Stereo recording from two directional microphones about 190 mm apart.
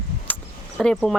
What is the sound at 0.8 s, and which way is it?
Speech, 5° left (ahead or behind).